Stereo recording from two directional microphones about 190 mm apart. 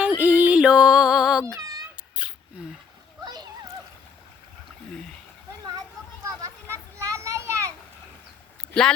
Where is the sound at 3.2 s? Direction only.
20° right (ahead or behind).